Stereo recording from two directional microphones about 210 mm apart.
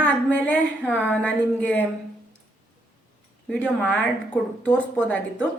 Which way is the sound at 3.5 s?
5° left (ahead or behind).